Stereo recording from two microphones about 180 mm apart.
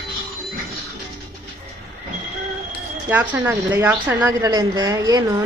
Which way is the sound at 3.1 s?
10° right (ahead or behind).